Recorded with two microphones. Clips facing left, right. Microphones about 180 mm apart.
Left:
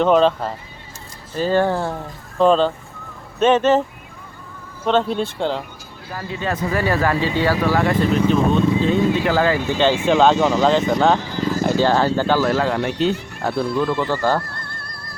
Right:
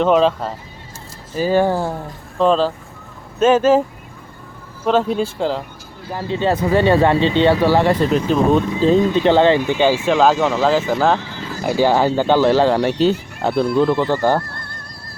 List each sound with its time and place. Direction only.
0.0 s speech: centre (ahead or behind)
2.4 s speech: centre (ahead or behind)
4.9 s speech: 5° right (ahead or behind)
6.1 s speech: 30° right (ahead or behind)
9.7 s speech: 10° right (ahead or behind); by 13.1 s 35° right (ahead or behind)
13.6 s speech: 25° right (ahead or behind)